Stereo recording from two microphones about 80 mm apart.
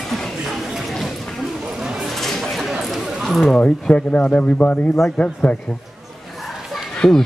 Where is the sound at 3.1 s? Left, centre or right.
Centre.